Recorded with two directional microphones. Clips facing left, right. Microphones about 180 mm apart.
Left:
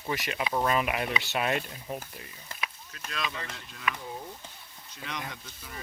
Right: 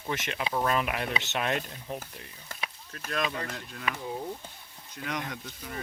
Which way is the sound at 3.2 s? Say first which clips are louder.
Right 4 dB; 40° right (ahead or behind).